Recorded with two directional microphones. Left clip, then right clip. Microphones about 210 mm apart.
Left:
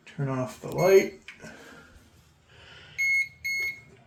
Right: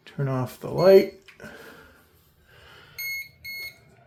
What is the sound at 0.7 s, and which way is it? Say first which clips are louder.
Speech: right 5 dB; 45° right (ahead or behind).